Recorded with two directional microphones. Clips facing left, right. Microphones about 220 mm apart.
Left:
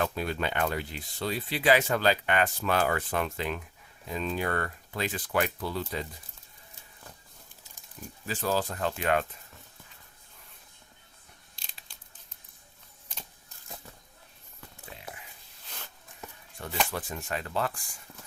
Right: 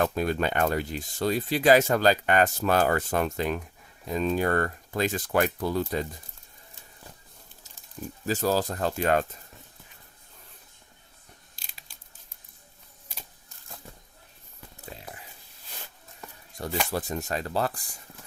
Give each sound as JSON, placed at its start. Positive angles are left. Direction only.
{"t": 0.0, "sound": "speech", "side_deg": -45}
{"t": 8.3, "sound": "speech", "side_deg": -40}
{"t": 14.9, "sound": "a sound", "side_deg": -35}
{"t": 16.9, "sound": "speech", "side_deg": -40}